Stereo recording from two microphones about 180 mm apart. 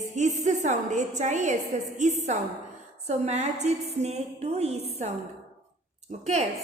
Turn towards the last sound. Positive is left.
turn(degrees=-40)  # may be behind; listen again after turning